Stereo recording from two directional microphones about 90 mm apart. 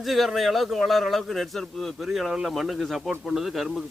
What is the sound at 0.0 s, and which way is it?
A man's voice, centre (ahead or behind).